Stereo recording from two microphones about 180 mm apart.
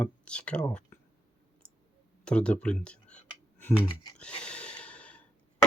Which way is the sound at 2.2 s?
5° left (ahead or behind).